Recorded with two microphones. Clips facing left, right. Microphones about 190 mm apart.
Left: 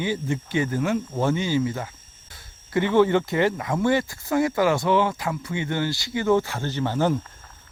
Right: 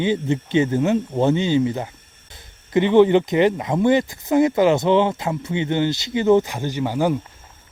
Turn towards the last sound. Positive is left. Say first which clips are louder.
# right 2 dB
turn(degrees=-10)  # may be behind; listen again after turning